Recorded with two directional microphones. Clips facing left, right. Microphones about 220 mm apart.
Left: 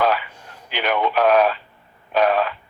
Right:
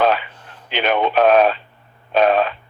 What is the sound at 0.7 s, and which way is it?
Speech, 25° right (ahead or behind).